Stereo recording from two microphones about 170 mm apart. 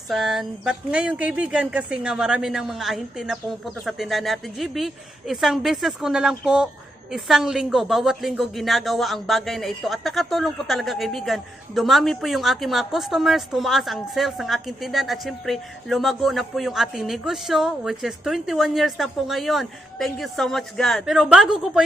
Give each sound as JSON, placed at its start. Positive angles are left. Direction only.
{"t": 0.1, "sound": "a woman's voice", "side_deg": 0}